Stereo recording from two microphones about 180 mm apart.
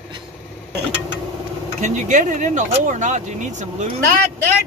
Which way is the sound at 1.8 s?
45° right (ahead or behind).